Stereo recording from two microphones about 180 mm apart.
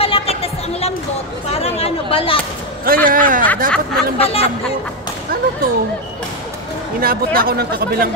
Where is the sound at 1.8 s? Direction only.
30° left (ahead or behind).